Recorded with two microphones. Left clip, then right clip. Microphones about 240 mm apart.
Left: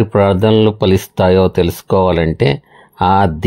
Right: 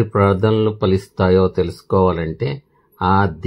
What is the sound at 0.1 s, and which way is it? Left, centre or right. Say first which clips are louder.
Speech: left 5 dB; left.